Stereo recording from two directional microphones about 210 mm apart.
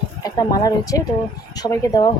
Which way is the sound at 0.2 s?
20° left (ahead or behind).